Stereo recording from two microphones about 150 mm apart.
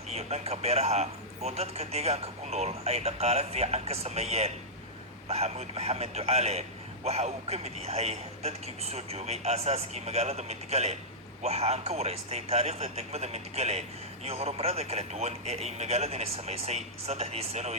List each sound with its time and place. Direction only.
0.1 s a man's voice: 45° right (ahead or behind)